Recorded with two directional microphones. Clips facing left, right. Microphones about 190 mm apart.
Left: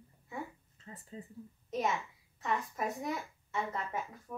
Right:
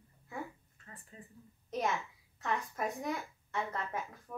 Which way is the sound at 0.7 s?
20° left (ahead or behind).